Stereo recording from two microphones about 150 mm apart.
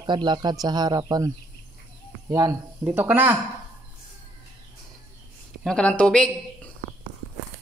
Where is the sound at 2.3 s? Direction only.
25° right (ahead or behind).